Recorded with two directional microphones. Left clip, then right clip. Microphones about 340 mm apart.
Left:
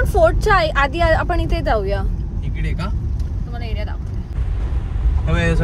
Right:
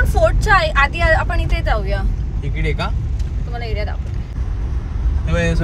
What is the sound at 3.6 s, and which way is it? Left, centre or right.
Speech, centre.